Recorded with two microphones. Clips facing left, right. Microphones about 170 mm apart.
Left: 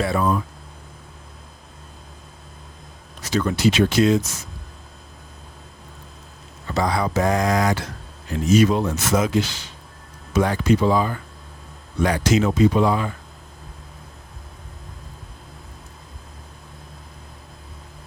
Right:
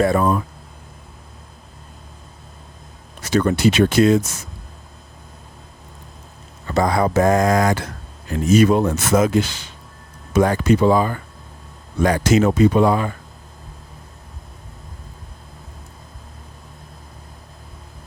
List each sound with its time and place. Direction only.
0.0 s speech: 50° right (ahead or behind)
3.2 s speech: 60° right (ahead or behind)
6.7 s speech: 50° right (ahead or behind)